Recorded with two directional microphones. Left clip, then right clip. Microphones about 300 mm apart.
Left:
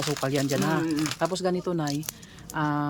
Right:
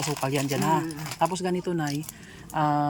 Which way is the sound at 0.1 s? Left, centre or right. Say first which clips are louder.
Left 2 dB; centre.